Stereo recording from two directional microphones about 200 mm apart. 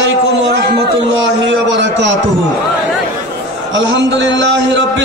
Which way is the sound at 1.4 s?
65° right (ahead or behind).